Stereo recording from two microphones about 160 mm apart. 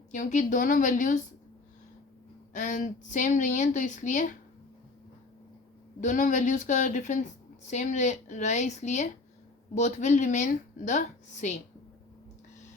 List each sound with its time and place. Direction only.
0.1 s speech: 50° left (ahead or behind)
2.5 s speech: 50° left (ahead or behind)
6.0 s speech: 55° left (ahead or behind)